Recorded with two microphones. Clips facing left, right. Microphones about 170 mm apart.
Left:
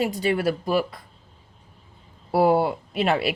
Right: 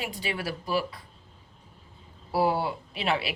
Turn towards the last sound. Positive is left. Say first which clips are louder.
# left 6 dB
turn(degrees=50)  # may be behind; listen again after turning